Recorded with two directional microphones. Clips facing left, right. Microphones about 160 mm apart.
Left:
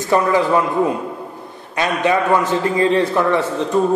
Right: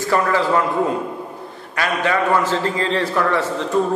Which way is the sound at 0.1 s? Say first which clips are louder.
Left 3 dB; 20° left (ahead or behind).